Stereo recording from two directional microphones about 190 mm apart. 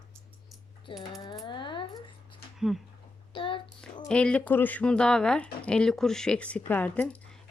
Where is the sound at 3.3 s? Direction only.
25° left (ahead or behind).